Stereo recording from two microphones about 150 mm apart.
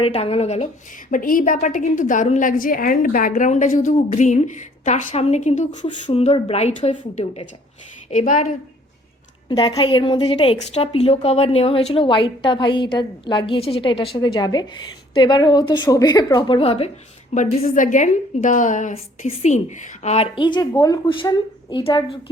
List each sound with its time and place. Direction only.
0.0 s a woman's voice: 40° left (ahead or behind)
1.1 s a woman's voice: 65° left (ahead or behind)
5.8 s a woman's voice: 40° left (ahead or behind); by 8.5 s 60° left (ahead or behind)
9.5 s a woman's voice: 30° left (ahead or behind)
17.3 s a woman's voice: 55° left (ahead or behind); by 22.2 s 35° left (ahead or behind)